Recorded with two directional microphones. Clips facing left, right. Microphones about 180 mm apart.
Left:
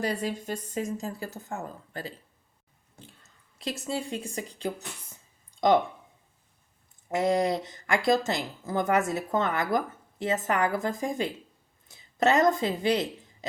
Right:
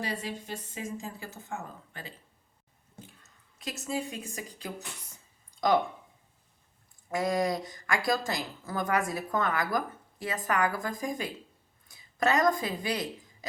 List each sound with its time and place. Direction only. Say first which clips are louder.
0.0 s speech: left 6 dB; 45° left (ahead or behind)
3.6 s speech: left 2 dB; 30° left (ahead or behind)
7.1 s speech: left 3 dB; 25° left (ahead or behind)